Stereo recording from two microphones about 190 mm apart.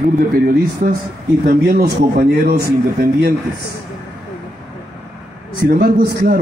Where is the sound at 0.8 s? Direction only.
50° right (ahead or behind).